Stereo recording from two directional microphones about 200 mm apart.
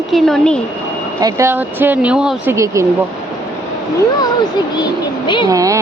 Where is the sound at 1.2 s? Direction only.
15° right (ahead or behind).